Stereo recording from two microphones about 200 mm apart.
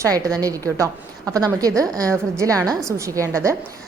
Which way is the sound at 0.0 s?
20° right (ahead or behind).